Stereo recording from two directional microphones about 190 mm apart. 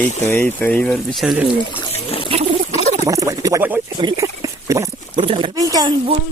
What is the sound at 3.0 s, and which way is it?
Speech, 15° right (ahead or behind).